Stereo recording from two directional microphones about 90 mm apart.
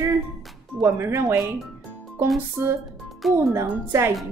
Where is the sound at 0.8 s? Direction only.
30° right (ahead or behind).